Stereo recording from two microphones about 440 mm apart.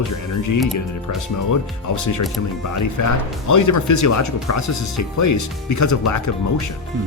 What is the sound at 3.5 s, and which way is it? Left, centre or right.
Speech, left.